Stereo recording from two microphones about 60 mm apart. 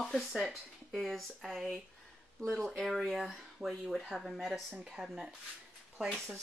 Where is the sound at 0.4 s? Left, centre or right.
Centre.